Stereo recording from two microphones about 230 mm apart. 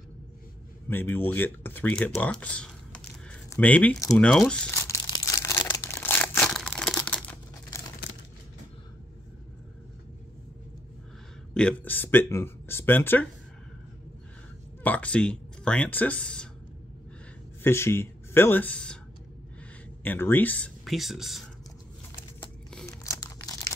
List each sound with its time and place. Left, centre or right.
0.8 s speech: centre
4.3 s crumpling: centre
11.5 s speech: centre
14.8 s speech: centre
17.6 s speech: centre
20.0 s speech: centre
22.7 s crumpling: centre
23.0 s crumpling: centre